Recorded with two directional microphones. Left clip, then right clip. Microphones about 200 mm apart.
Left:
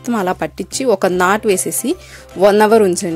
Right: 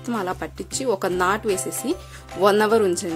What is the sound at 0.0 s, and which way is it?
Speech, 30° left (ahead or behind).